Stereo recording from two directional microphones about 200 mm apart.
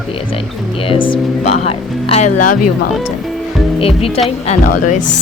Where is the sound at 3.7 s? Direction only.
30° left (ahead or behind).